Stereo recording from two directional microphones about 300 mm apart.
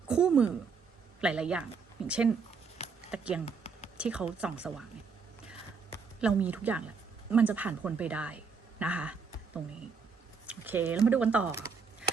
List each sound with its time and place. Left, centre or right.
0.1 s speech: centre
3.4 s a sound: left
3.9 s speech: centre
6.1 s speech: centre
10.4 s speech: centre